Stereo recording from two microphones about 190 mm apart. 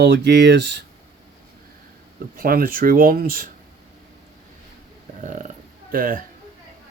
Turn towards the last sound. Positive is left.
turn(degrees=-45)  # may be behind; listen again after turning